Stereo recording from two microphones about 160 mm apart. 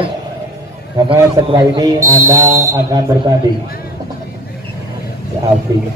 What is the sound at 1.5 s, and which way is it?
Speech, 20° right (ahead or behind).